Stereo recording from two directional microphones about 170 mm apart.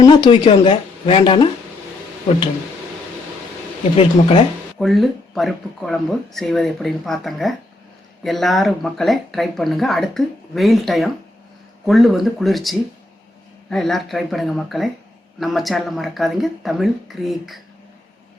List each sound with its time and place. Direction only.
0.0 s speech: 30° left (ahead or behind)
3.9 s speech: 30° left (ahead or behind)
4.8 s speech: centre (ahead or behind)